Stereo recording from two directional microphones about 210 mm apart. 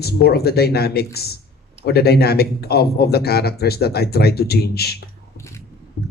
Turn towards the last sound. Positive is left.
turn(degrees=50)  # may be behind; listen again after turning